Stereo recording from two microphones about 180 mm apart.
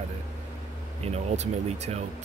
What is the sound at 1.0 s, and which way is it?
Speech, 35° right (ahead or behind).